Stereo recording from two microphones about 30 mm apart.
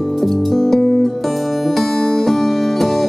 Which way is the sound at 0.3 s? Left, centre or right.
Centre.